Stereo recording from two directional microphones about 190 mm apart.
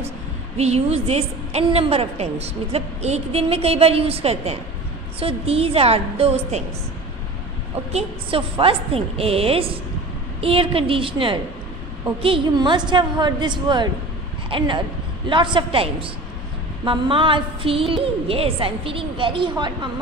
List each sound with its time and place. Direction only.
0.6 s a woman's voice: 35° right (ahead or behind)
7.9 s a woman's voice: 30° right (ahead or behind)